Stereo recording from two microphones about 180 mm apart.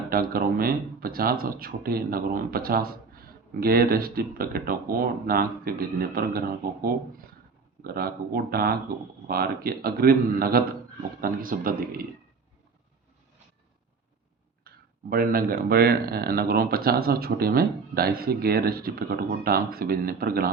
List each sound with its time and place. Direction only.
0.1 s speech: 55° right (ahead or behind)
7.9 s speech: 55° right (ahead or behind)
15.1 s speech: 55° right (ahead or behind)